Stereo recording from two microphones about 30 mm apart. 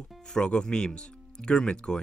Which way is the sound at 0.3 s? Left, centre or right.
Left.